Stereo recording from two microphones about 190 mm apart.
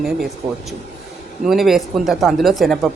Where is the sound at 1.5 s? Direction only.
Centre (ahead or behind).